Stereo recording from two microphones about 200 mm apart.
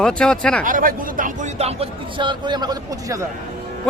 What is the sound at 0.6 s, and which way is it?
Speech, 45° right (ahead or behind).